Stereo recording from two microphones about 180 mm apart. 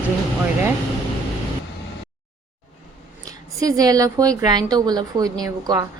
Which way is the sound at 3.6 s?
20° right (ahead or behind).